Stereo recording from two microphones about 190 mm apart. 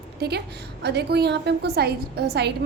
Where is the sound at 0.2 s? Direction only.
60° right (ahead or behind).